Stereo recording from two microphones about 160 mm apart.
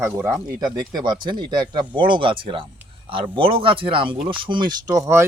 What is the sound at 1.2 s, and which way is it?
Speech, 30° right (ahead or behind).